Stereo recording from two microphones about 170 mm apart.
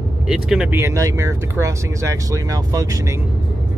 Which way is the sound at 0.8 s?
20° right (ahead or behind).